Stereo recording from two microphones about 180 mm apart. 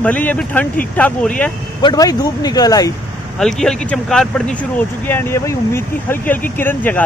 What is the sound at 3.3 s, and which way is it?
Speech, centre (ahead or behind).